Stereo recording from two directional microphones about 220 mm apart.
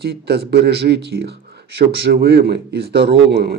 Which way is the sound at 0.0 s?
45° right (ahead or behind).